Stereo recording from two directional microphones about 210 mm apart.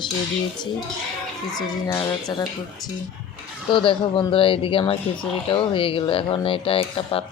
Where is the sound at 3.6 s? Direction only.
25° left (ahead or behind).